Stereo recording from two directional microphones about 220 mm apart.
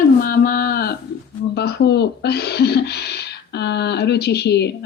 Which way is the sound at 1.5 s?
50° left (ahead or behind).